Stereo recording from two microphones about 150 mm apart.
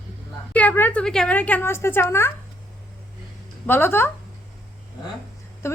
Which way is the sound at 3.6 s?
15° left (ahead or behind).